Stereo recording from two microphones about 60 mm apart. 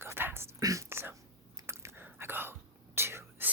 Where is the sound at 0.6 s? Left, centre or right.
Right.